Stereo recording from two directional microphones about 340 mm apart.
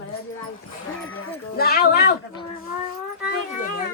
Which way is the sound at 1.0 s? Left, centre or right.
Left.